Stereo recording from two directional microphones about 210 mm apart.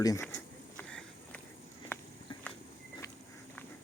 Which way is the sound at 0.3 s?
5° left (ahead or behind).